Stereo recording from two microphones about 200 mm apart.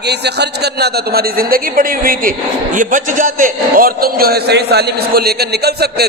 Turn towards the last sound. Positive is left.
turn(degrees=-55)  # may be behind; listen again after turning